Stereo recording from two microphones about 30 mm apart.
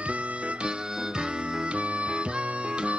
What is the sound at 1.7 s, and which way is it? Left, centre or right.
Music, right.